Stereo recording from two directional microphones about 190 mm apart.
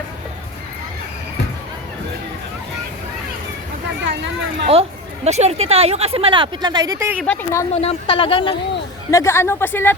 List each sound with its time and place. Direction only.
4.0 s a sound: 70° right (ahead or behind)
4.6 s a woman's voice: 30° right (ahead or behind); by 7.2 s 15° right (ahead or behind)
7.2 s a woman's voice: 10° left (ahead or behind)
7.7 s speech: 30° left (ahead or behind)
9.0 s a woman's voice: 15° left (ahead or behind)